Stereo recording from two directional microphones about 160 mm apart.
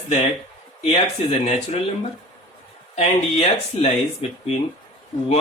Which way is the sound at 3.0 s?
40° left (ahead or behind).